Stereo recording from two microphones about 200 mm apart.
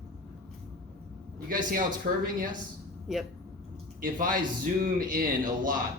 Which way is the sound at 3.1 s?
Centre (ahead or behind).